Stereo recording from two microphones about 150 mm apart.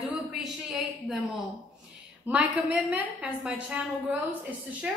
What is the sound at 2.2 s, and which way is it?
A woman's voice, 10° right (ahead or behind).